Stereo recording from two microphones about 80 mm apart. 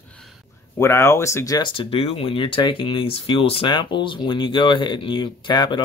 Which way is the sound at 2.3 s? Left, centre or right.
Left.